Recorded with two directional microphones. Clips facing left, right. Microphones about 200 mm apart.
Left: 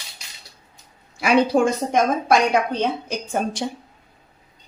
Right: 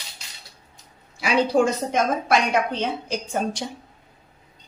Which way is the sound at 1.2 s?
55° left (ahead or behind).